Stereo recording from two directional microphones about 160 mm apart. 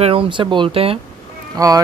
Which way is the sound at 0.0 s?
35° right (ahead or behind).